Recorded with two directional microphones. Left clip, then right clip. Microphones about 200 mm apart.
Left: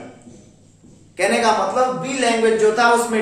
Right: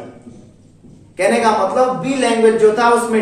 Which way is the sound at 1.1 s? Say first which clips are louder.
Right 3 dB; 15° left (ahead or behind).